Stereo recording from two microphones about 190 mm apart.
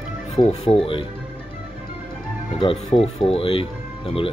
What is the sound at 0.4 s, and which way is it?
Speech, 30° left (ahead or behind).